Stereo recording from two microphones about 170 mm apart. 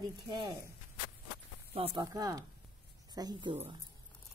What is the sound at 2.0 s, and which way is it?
Speech, 20° right (ahead or behind).